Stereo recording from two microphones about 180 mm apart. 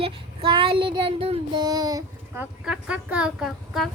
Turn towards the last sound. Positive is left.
turn(degrees=0)  # may be behind; listen again after turning